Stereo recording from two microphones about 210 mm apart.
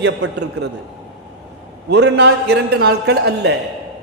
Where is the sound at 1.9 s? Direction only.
55° right (ahead or behind).